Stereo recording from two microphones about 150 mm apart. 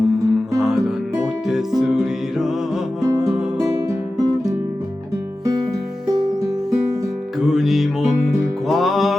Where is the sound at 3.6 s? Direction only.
40° left (ahead or behind).